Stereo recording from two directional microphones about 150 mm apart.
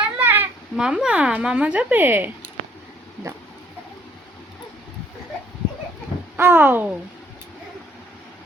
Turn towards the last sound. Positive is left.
turn(degrees=-10)  # may be behind; listen again after turning